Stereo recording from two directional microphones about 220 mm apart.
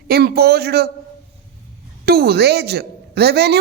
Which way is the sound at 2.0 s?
45° right (ahead or behind).